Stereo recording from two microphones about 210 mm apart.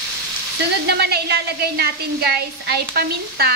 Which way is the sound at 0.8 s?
50° right (ahead or behind).